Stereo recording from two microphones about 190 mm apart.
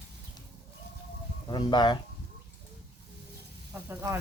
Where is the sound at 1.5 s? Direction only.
25° left (ahead or behind).